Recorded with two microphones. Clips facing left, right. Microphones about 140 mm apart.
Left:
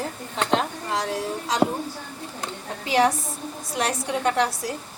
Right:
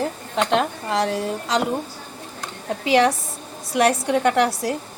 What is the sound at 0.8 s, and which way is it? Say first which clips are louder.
Speech: right 4 dB; 65° right (ahead or behind).